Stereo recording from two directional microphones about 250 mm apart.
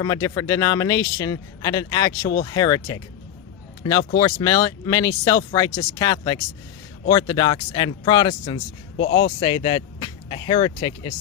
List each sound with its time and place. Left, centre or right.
0.0 s a man's voice: centre
8.5 s a man's voice: left
9.1 s speech: centre